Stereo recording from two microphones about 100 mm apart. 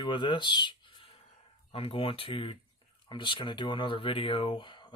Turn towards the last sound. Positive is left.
turn(degrees=50)  # may be behind; listen again after turning